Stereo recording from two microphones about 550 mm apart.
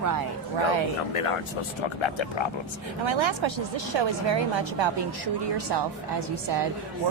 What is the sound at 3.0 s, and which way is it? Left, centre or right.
Speech, right.